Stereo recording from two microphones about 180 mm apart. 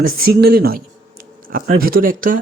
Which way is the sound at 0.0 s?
55° right (ahead or behind).